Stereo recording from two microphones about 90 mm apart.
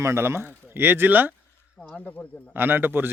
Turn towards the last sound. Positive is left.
turn(degrees=-25)  # may be behind; listen again after turning